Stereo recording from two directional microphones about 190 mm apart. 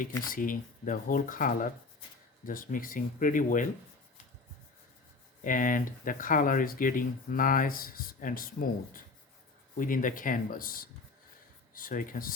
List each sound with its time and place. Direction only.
0.3 s speech: 45° left (ahead or behind)
5.4 s speech: 45° left (ahead or behind)